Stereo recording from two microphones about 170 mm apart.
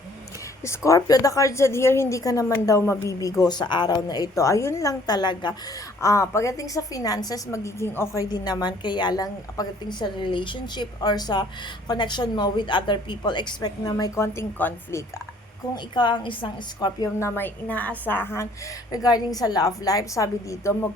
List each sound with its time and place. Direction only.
0.9 s a woman's voice: 20° left (ahead or behind)
15.7 s a woman's voice: 25° left (ahead or behind)